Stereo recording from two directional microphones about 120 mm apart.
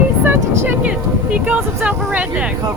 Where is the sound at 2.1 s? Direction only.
10° right (ahead or behind).